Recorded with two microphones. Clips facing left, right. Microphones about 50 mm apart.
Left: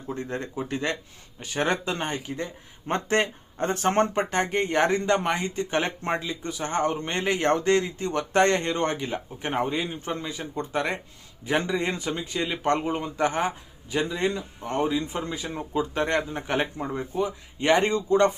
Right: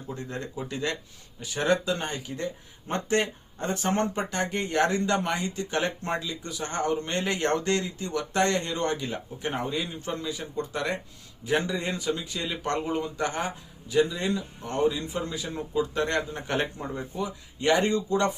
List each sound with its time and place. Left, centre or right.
0.2 s speech: left
15.0 s speech: left
16.0 s speech: left